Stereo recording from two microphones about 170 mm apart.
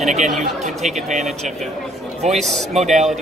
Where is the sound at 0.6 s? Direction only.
45° right (ahead or behind).